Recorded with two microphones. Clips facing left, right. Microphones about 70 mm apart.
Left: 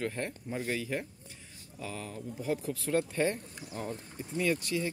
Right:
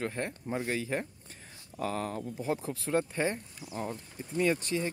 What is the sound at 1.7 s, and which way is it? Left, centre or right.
Speech, right.